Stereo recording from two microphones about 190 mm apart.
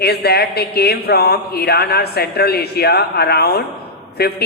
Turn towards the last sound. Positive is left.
turn(degrees=55)  # may be behind; listen again after turning